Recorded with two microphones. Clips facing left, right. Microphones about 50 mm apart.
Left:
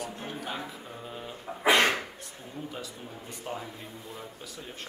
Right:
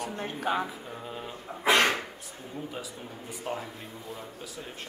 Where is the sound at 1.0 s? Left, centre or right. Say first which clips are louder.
Right 1 dB; centre.